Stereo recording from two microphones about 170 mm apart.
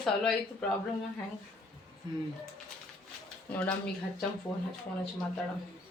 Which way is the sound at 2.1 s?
25° right (ahead or behind).